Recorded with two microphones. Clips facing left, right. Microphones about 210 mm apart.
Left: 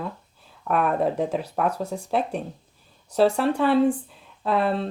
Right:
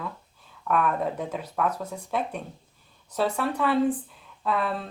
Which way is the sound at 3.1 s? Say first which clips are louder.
Left 6 dB; 30° left (ahead or behind).